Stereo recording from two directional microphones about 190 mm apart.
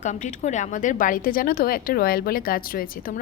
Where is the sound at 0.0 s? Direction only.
40° left (ahead or behind).